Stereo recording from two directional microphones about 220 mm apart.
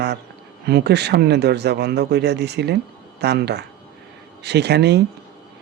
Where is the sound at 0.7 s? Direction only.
50° right (ahead or behind).